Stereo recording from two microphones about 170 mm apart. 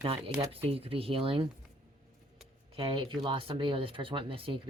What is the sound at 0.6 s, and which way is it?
Speech, 35° right (ahead or behind).